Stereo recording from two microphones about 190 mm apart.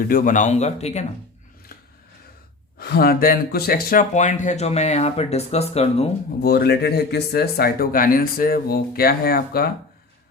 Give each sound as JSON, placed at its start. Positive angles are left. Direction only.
{"t": 0.1, "sound": "speech", "side_deg": 45}
{"t": 2.7, "sound": "speech", "side_deg": 55}
{"t": 6.4, "sound": "speech", "side_deg": 55}